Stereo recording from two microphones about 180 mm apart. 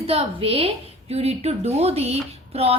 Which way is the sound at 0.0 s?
35° right (ahead or behind).